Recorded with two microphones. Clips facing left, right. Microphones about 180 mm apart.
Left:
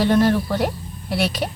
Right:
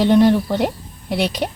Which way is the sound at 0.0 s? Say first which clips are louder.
Right 4 dB; 20° right (ahead or behind).